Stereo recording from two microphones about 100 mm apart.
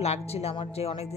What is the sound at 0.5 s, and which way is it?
Speech, 60° left (ahead or behind).